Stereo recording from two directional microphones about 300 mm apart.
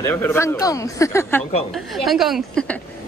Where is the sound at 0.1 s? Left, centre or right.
Centre.